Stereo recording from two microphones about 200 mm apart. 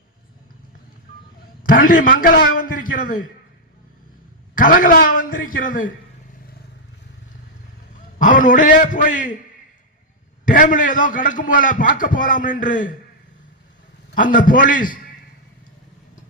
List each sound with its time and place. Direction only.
1.6 s a man's voice: 45° left (ahead or behind)
4.5 s a man's voice: 45° left (ahead or behind)
8.2 s a man's voice: 40° left (ahead or behind)
10.4 s a man's voice: 40° left (ahead or behind)
14.2 s a man's voice: 45° left (ahead or behind)